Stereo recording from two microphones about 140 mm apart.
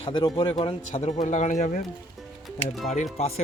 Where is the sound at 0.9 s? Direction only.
55° left (ahead or behind).